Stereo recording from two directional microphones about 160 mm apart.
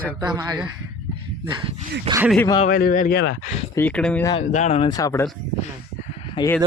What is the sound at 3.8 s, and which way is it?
Speech, 10° left (ahead or behind).